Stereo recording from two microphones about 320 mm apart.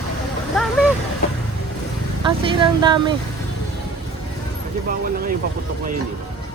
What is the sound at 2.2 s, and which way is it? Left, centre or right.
Speech, centre.